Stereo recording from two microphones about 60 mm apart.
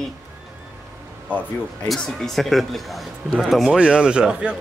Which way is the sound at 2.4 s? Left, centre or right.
Centre.